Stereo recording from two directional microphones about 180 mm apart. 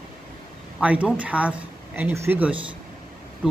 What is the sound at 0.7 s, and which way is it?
Speech, 5° right (ahead or behind).